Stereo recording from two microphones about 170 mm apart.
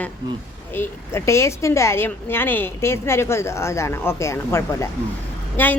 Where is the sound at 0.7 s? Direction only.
15° left (ahead or behind).